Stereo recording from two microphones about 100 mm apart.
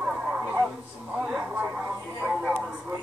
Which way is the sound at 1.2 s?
10° right (ahead or behind).